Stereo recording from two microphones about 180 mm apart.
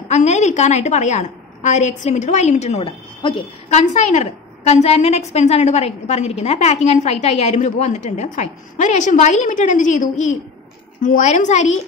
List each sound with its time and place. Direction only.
0.1 s a woman's voice: 40° left (ahead or behind)